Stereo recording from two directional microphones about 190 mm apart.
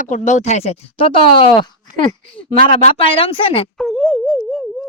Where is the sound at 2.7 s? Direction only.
30° left (ahead or behind).